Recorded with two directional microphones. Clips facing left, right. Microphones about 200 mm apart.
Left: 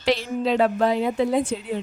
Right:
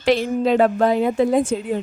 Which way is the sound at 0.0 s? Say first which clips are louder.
Right 5 dB; 50° right (ahead or behind).